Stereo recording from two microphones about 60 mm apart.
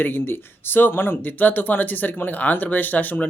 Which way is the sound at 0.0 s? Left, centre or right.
Left.